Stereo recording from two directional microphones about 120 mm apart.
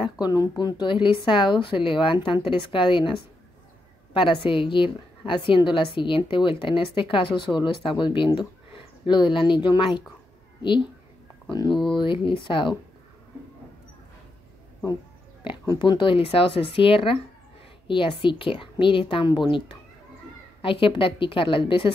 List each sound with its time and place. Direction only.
0.0 s speech: 35° left (ahead or behind)
11.4 s speech: 35° left (ahead or behind)
15.4 s speech: 40° left (ahead or behind)